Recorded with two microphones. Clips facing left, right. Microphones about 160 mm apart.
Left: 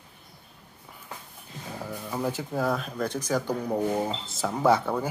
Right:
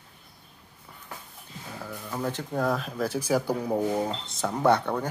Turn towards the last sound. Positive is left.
turn(degrees=5)  # may be behind; listen again after turning